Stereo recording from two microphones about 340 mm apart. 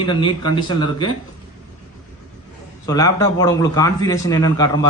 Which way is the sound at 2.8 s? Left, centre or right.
Centre.